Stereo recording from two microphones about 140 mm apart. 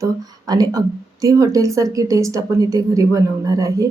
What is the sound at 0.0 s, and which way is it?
Speech, 25° right (ahead or behind).